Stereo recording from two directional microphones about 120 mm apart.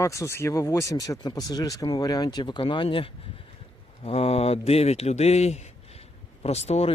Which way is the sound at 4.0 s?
55° left (ahead or behind).